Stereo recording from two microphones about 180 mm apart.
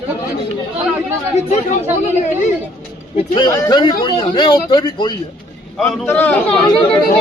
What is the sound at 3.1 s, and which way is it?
A man's voice, 25° left (ahead or behind).